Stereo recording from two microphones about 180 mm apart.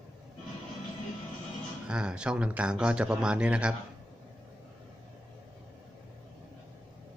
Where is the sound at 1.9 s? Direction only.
5° right (ahead or behind).